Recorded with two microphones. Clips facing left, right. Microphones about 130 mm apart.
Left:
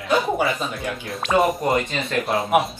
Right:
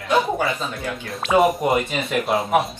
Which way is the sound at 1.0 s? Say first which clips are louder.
Right 2 dB; centre (ahead or behind).